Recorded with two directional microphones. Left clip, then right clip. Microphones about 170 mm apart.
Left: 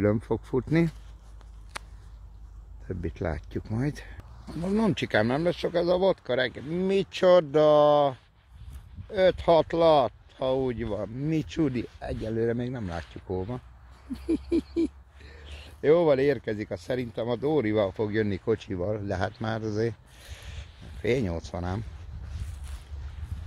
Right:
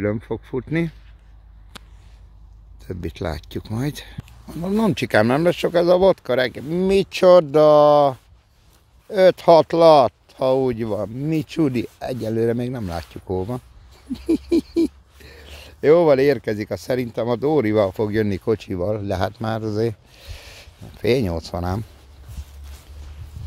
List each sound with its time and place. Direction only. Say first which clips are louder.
0.0 s speech: right 2 dB; 5° left (ahead or behind)
2.9 s speech: right 5 dB; 20° right (ahead or behind)
4.6 s speech: right 6 dB; 30° right (ahead or behind); by 8.2 s 45° right (ahead or behind)
9.1 s speech: right 9 dB; 55° right (ahead or behind); by 11.7 s 35° right (ahead or behind)
11.7 s speech: right 8 dB; 55° right (ahead or behind); by 20.0 s 35° right (ahead or behind)
20.2 s speech: right 6 dB; 45° right (ahead or behind)